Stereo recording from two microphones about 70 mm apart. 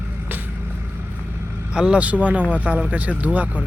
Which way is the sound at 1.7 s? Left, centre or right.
Centre.